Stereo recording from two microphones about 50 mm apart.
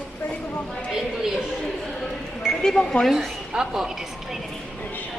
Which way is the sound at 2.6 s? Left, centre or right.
Centre.